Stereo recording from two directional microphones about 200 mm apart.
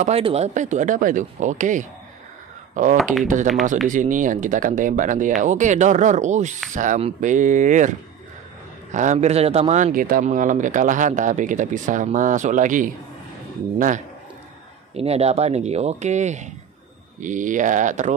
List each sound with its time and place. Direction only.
0.0 s speech: 30° right (ahead or behind)
8.9 s speech: 35° right (ahead or behind)